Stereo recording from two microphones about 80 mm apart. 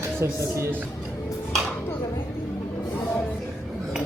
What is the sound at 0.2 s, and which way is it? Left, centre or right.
Speech, right.